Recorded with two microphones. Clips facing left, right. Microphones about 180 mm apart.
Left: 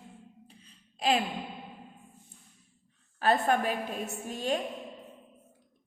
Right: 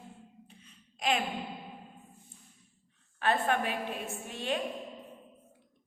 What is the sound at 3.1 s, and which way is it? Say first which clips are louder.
A woman's voice: left 3 dB; 40° left (ahead or behind).